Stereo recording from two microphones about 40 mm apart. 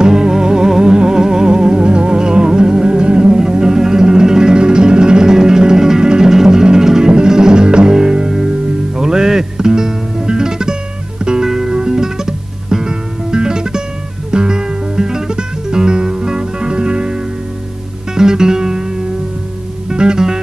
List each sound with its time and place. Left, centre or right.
0.0 s music: centre